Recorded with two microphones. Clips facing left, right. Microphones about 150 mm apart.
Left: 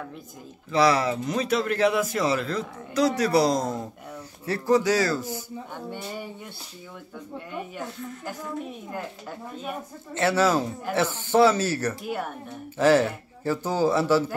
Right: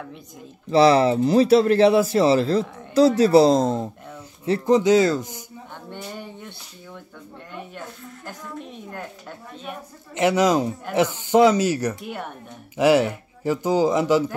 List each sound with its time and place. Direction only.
0.7 s speech: 30° right (ahead or behind)
5.9 s a woman's voice: 5° left (ahead or behind)
8.3 s a woman's voice: 5° left (ahead or behind)
10.1 s speech: 15° right (ahead or behind)